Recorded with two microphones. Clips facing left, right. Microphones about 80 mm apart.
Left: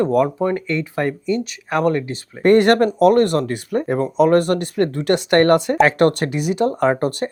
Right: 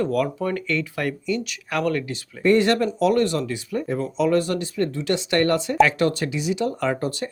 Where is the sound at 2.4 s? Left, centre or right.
Left.